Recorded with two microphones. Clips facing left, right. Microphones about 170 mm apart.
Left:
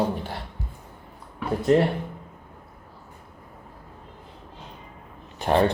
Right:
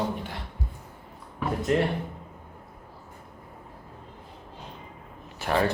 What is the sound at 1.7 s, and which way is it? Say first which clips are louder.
Speech: left 6 dB; 35° left (ahead or behind).